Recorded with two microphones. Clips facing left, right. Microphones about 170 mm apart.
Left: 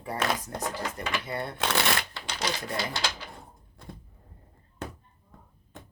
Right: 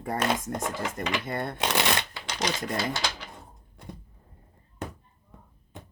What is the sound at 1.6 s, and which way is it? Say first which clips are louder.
Speech: even; 20° right (ahead or behind).